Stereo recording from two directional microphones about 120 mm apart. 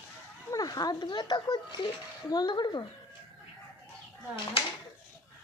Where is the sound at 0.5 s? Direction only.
30° left (ahead or behind).